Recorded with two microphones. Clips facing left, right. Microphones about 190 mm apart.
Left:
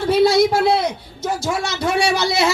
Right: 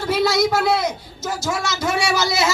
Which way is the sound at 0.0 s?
30° left (ahead or behind).